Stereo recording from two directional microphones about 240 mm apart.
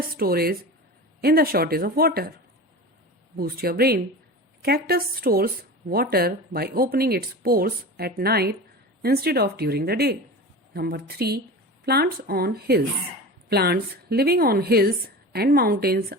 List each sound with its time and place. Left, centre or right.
0.2 s speech: right
3.3 s speech: right